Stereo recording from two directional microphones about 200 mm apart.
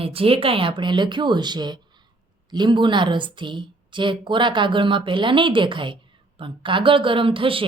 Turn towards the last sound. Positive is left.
turn(degrees=-25)  # may be behind; listen again after turning